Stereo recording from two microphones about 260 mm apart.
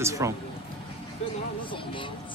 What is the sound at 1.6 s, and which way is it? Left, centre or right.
Music, centre.